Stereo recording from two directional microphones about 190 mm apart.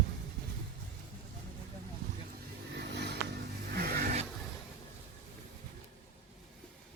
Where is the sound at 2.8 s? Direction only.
60° right (ahead or behind).